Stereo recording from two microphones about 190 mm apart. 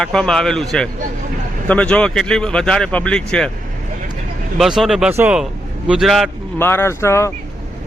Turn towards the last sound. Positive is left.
turn(degrees=15)  # may be behind; listen again after turning